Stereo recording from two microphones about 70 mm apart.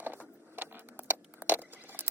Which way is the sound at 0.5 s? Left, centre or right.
Right.